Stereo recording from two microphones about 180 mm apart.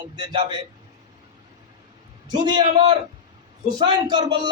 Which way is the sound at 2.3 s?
25° right (ahead or behind).